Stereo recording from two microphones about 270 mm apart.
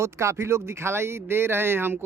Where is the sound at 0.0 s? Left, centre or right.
Centre.